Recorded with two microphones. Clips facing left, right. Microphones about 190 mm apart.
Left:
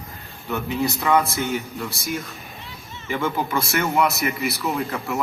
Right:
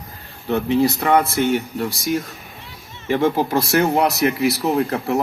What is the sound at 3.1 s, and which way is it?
Speech, 35° right (ahead or behind).